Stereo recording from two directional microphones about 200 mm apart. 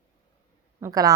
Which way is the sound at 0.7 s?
15° right (ahead or behind).